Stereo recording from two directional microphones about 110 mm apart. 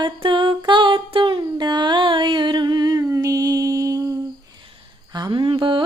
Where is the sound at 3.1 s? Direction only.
30° right (ahead or behind).